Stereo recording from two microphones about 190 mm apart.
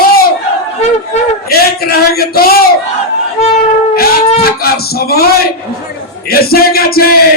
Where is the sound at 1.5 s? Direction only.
55° left (ahead or behind).